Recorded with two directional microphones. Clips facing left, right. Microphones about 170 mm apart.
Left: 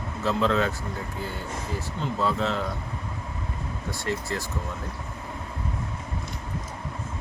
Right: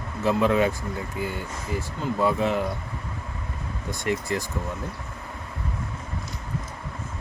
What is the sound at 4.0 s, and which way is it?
Speech, 15° right (ahead or behind).